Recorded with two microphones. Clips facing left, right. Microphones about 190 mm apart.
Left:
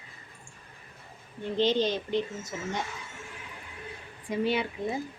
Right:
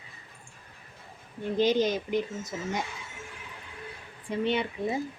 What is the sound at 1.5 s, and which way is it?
Speech, 10° right (ahead or behind).